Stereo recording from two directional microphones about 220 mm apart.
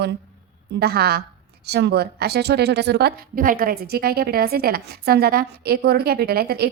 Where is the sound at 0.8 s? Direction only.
45° right (ahead or behind).